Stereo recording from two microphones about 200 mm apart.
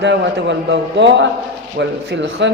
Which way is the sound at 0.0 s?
60° right (ahead or behind).